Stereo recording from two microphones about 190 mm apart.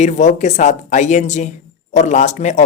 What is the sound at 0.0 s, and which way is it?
Speech, 40° left (ahead or behind).